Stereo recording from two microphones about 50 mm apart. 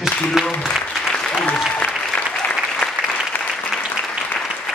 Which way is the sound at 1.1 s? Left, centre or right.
Centre.